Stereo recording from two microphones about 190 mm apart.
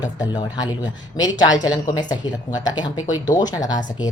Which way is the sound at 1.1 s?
20° left (ahead or behind).